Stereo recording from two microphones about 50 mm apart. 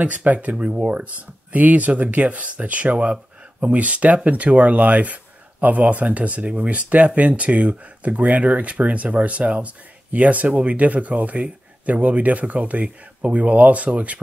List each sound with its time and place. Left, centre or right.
0.0 s speech: right